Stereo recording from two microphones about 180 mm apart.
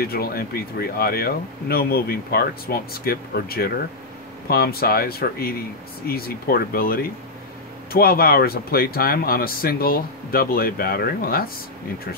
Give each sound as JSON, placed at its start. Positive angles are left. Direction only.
{"t": 0.0, "sound": "speech", "side_deg": 60}